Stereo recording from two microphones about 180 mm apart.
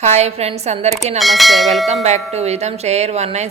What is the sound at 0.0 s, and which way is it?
Speech, 35° right (ahead or behind).